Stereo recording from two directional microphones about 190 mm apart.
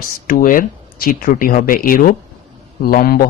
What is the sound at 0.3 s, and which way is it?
Speech, 45° left (ahead or behind).